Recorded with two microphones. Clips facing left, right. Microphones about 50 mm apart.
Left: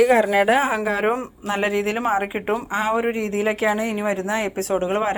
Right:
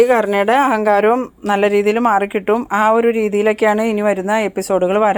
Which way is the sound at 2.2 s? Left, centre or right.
Right.